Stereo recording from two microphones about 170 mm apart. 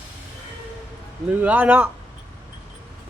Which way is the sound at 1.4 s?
10° right (ahead or behind).